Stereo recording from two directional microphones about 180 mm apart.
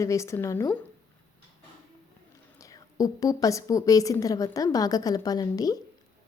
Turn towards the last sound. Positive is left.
turn(degrees=20)  # may be behind; listen again after turning